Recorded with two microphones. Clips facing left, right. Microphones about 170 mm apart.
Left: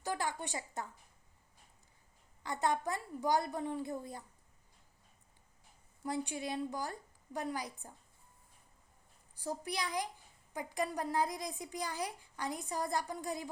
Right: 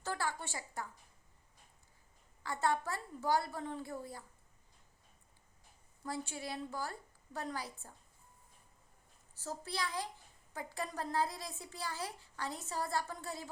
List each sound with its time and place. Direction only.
0.0 s a child's voice: 15° left (ahead or behind)
2.4 s a child's voice: 20° left (ahead or behind)
6.0 s a child's voice: 15° left (ahead or behind)
9.3 s a child's voice: 15° left (ahead or behind)